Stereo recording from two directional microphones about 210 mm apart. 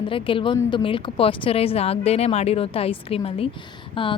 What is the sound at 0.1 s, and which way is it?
A woman's voice, 25° left (ahead or behind).